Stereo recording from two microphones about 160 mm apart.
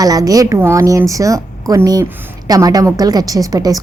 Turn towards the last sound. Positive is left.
turn(degrees=-25)  # may be behind; listen again after turning